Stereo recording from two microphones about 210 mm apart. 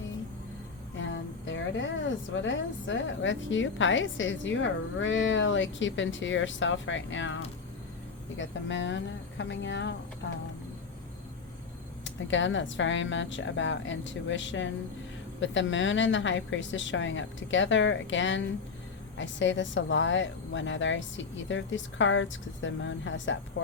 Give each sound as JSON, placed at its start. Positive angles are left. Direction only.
{"t": 0.9, "sound": "speech", "side_deg": 60}
{"t": 8.4, "sound": "speech", "side_deg": 60}
{"t": 12.0, "sound": "speech", "side_deg": 60}